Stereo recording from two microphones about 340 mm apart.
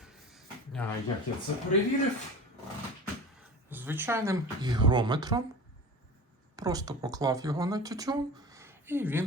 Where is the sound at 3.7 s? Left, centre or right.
Centre.